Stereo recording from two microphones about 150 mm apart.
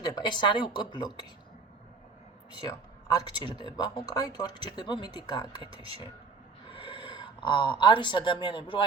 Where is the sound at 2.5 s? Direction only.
25° left (ahead or behind).